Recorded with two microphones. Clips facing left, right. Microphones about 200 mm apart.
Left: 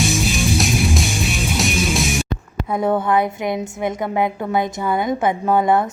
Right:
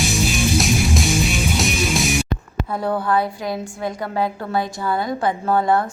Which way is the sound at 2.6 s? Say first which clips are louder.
Left 3 dB; 20° left (ahead or behind).